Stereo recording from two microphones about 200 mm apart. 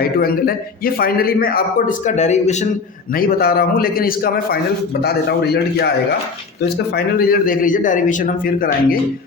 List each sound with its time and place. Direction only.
0.0 s a man's voice: 50° left (ahead or behind)
3.2 s a man's voice: 50° left (ahead or behind)